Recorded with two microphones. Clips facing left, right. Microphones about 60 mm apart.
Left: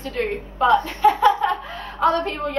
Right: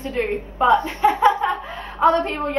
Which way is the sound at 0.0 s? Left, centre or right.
Right.